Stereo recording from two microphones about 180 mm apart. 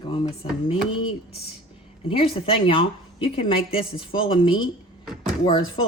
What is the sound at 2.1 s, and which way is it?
A woman's voice, 30° left (ahead or behind).